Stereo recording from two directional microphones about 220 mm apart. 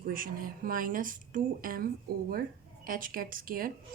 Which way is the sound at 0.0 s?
40° right (ahead or behind).